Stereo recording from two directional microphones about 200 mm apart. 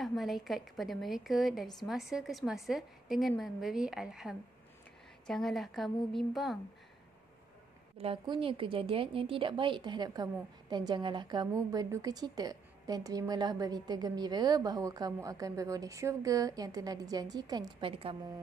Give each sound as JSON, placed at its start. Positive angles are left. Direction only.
{"t": 0.0, "sound": "a woman's voice", "side_deg": 0}
{"t": 8.0, "sound": "a woman's voice", "side_deg": -25}